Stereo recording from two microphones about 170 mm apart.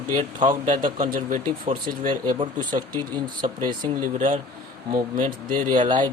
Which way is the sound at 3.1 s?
25° right (ahead or behind).